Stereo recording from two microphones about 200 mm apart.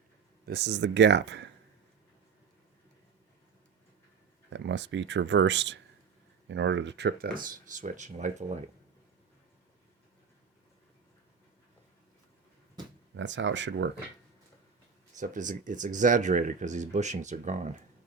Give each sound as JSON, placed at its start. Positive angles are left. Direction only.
{"t": 0.4, "sound": "speech", "side_deg": -55}
{"t": 4.4, "sound": "speech", "side_deg": -60}
{"t": 13.1, "sound": "speech", "side_deg": -65}
{"t": 15.1, "sound": "speech", "side_deg": -40}